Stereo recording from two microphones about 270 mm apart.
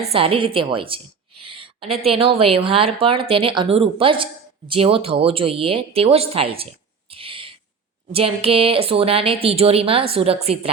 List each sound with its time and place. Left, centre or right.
0.0 s a woman's voice: right
1.4 s a sound: centre
2.0 s a woman's voice: right
7.1 s owl: centre
8.1 s a woman's voice: right